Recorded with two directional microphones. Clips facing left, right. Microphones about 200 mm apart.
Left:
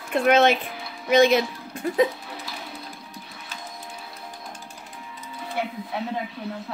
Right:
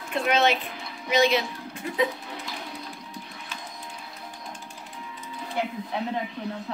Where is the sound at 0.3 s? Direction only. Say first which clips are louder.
Left 5 dB; 50° left (ahead or behind).